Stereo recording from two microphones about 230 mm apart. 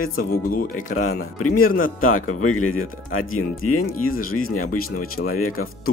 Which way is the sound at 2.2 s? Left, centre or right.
Left.